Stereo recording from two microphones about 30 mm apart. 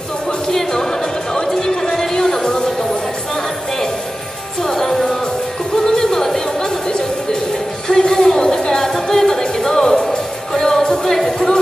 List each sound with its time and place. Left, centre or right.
0.5 s music: centre
4.6 s music: centre
7.9 s a sound: centre
9.1 s music: centre